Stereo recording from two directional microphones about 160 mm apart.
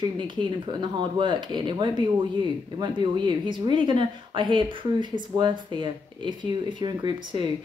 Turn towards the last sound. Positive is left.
turn(degrees=-25)  # may be behind; listen again after turning